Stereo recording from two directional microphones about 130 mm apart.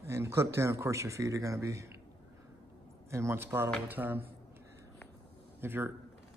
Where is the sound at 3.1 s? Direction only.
20° right (ahead or behind).